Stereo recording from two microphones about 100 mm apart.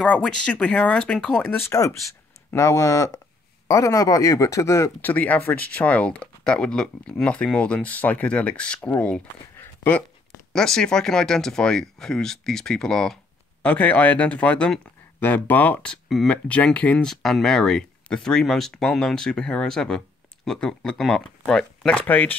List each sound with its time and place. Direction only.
0.0 s speech: 10° left (ahead or behind)
1.7 s speech: 30° left (ahead or behind)
5.0 s speech: 15° left (ahead or behind)
13.6 s speech: 15° left (ahead or behind)